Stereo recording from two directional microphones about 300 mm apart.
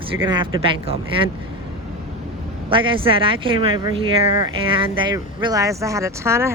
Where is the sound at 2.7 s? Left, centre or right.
Centre.